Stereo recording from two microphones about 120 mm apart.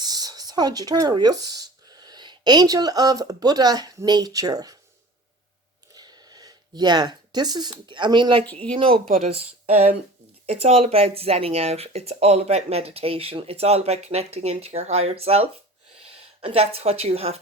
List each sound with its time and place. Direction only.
0.0 s speech: 35° right (ahead or behind)
5.9 s speech: 35° right (ahead or behind); by 17.4 s 55° right (ahead or behind)